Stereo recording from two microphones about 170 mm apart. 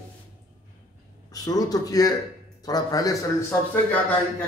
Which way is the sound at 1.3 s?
20° left (ahead or behind).